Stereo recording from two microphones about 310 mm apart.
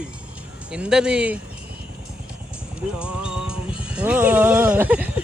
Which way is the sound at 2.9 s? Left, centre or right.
Centre.